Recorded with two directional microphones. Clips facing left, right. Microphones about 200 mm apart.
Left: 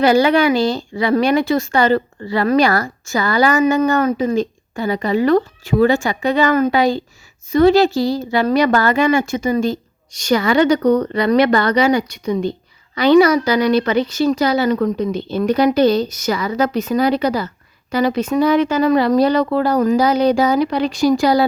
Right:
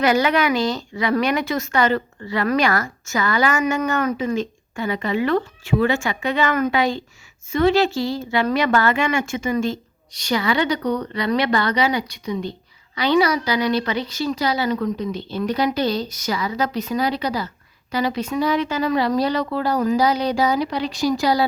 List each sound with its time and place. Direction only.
0.0 s a woman's voice: 30° left (ahead or behind); by 21.4 s 50° left (ahead or behind)